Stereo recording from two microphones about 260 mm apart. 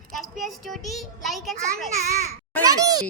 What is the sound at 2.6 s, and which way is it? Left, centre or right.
Speech, centre.